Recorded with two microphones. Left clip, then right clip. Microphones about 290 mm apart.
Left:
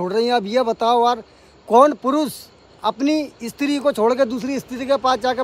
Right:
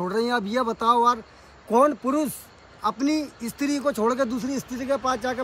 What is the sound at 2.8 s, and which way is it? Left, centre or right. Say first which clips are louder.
Speech: left 5 dB; centre.